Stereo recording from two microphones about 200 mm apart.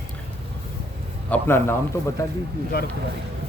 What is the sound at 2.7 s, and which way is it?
Speech, 50° left (ahead or behind).